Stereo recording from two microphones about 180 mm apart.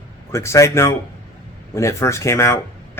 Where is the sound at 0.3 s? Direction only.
15° left (ahead or behind).